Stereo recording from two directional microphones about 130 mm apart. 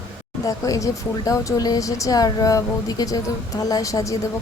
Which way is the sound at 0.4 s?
25° left (ahead or behind).